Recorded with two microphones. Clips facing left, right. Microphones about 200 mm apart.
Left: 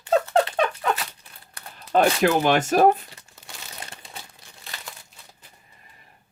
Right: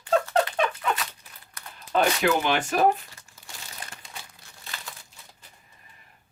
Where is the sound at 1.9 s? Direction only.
40° left (ahead or behind).